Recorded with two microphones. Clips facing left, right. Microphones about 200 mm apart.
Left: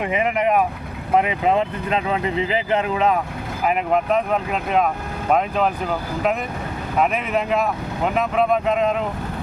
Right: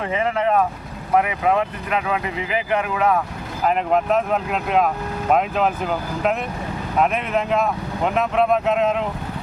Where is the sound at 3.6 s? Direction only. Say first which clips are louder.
Right 1 dB; 5° left (ahead or behind).